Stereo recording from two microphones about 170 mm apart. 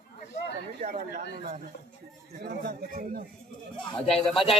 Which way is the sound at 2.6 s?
65° right (ahead or behind).